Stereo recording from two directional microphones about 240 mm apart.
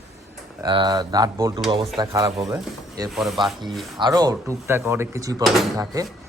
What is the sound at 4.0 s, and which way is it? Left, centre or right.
Speech, centre.